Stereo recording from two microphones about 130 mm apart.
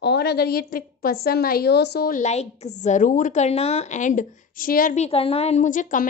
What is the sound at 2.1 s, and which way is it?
A woman's voice, 70° left (ahead or behind).